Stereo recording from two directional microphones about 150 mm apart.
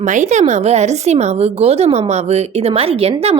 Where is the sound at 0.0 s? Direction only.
55° right (ahead or behind).